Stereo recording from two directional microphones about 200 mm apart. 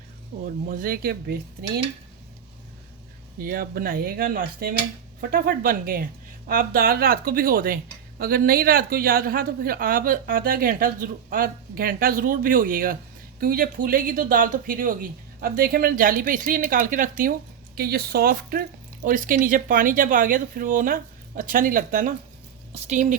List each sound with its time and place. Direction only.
0.4 s speech: 45° right (ahead or behind)
3.3 s speech: 45° right (ahead or behind)